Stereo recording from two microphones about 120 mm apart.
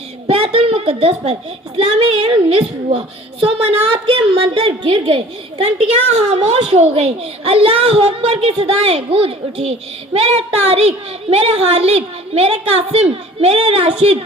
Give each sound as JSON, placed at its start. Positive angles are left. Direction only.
{"t": 0.3, "sound": "a child's voice", "side_deg": -55}